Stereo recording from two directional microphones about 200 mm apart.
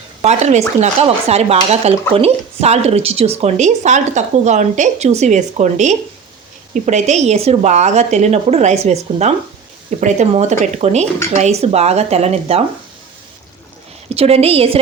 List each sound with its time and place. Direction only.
0.2 s speech: 35° right (ahead or behind)
14.1 s a woman's voice: 30° right (ahead or behind)